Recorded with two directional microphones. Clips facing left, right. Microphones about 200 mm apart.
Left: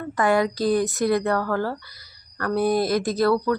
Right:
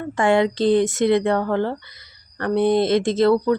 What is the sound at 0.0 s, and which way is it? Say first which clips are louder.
Speech: right 3 dB; 25° right (ahead or behind).